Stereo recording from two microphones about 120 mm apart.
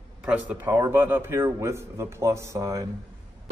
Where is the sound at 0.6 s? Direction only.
30° right (ahead or behind).